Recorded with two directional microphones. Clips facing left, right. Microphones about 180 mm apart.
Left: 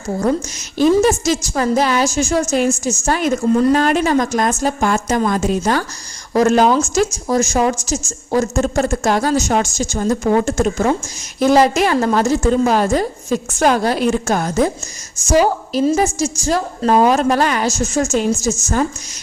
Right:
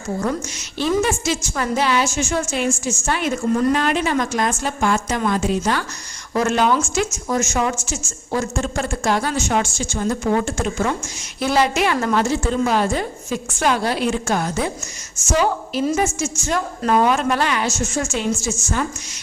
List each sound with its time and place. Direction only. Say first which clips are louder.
0.9 s a woman's voice: left 6 dB; 40° left (ahead or behind)